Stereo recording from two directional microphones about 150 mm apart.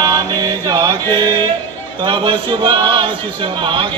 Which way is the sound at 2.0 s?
30° right (ahead or behind).